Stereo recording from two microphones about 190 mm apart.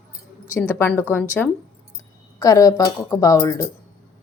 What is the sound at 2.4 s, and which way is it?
A woman's voice, 15° left (ahead or behind).